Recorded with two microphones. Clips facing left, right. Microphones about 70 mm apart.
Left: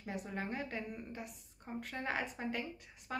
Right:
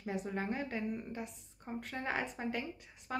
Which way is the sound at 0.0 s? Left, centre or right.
Centre.